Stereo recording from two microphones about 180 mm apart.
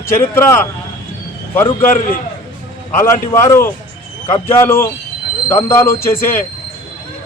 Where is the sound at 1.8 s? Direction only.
50° left (ahead or behind).